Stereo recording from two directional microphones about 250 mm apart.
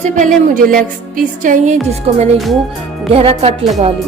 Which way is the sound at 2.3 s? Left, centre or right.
Centre.